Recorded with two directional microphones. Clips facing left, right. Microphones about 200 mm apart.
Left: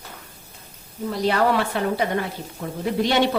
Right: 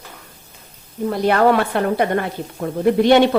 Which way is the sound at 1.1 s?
55° right (ahead or behind).